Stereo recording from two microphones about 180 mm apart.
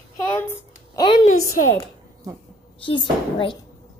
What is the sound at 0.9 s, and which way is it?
Speech, 25° left (ahead or behind).